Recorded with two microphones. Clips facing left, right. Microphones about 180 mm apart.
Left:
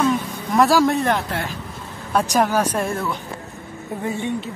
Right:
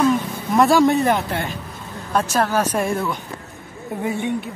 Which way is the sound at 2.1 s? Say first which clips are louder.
Left 1 dB; 15° left (ahead or behind).